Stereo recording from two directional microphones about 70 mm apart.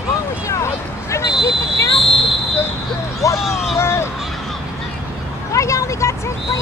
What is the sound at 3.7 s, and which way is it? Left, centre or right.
Vehicle, left.